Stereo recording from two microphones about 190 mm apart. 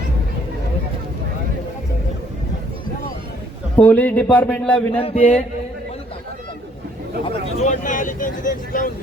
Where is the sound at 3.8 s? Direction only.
10° left (ahead or behind).